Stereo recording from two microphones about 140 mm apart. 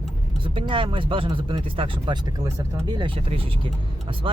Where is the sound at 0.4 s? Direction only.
35° right (ahead or behind).